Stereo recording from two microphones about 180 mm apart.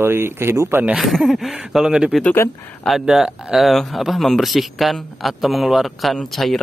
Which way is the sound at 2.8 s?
Centre (ahead or behind).